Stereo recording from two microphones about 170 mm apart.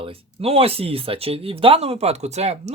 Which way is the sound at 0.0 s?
35° right (ahead or behind).